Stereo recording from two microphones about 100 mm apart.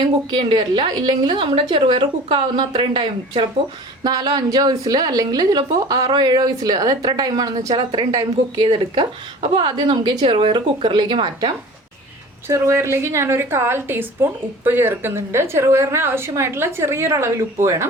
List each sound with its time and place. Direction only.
0.3 s a woman's voice: 50° right (ahead or behind)
4.0 s a woman's voice: 45° right (ahead or behind)
8.6 s a woman's voice: 60° right (ahead or behind)
12.5 s a woman's voice: 30° right (ahead or behind)